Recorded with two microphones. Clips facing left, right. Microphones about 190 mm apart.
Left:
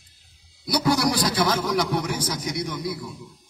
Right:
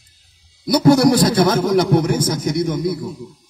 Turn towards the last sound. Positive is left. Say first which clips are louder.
# right 9 dB
turn(degrees=-45)  # may be behind; listen again after turning